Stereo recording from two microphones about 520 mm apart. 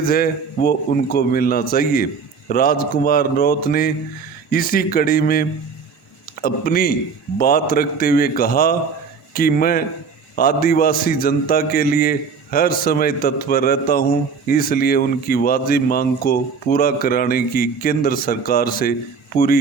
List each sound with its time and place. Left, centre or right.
0.0 s speech: centre